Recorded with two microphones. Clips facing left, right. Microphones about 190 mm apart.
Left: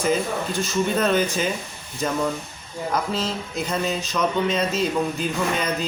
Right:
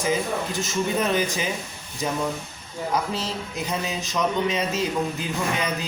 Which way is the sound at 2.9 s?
10° right (ahead or behind).